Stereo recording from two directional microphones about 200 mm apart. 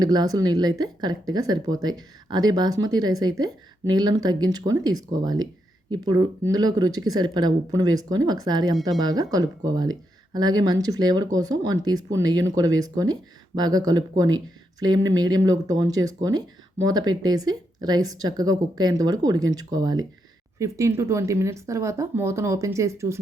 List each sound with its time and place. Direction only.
0.0 s speech: 20° right (ahead or behind)